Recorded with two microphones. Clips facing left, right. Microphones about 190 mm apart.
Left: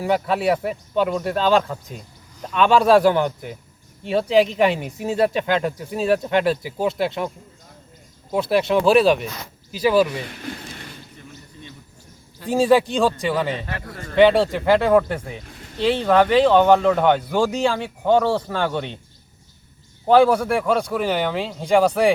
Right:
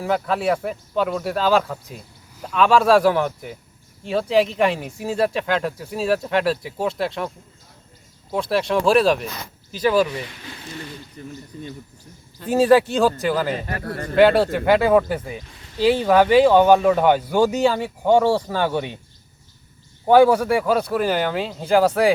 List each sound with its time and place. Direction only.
0.0 s speech: centre (ahead or behind)
8.3 s speech: 5° left (ahead or behind)
11.2 s a sound: 40° right (ahead or behind)
12.5 s speech: 5° right (ahead or behind)
13.8 s speech: 60° right (ahead or behind)
14.2 s speech: 5° right (ahead or behind)
20.1 s speech: 10° right (ahead or behind)